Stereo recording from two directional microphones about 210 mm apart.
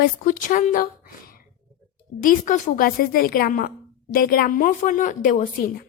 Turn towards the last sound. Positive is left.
turn(degrees=40)  # may be behind; listen again after turning